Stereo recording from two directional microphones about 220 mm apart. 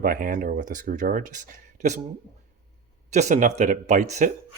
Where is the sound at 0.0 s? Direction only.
40° right (ahead or behind).